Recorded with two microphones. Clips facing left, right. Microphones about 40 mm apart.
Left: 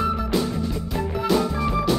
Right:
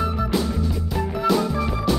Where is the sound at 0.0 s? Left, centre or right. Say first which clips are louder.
Even; centre.